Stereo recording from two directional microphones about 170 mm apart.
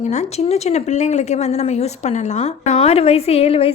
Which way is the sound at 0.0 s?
45° left (ahead or behind).